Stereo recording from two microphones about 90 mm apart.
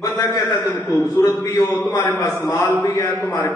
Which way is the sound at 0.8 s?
30° left (ahead or behind).